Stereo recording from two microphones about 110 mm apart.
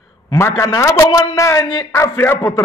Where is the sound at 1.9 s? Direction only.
20° left (ahead or behind).